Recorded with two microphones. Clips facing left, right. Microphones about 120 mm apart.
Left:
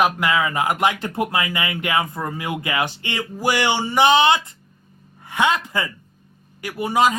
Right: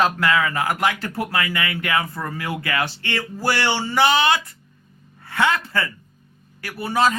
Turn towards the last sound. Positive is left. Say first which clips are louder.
# left 2 dB
turn(degrees=15)  # may be behind; listen again after turning